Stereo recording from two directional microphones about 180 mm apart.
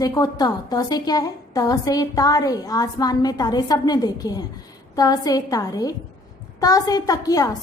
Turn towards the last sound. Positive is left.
turn(degrees=20)  # may be behind; listen again after turning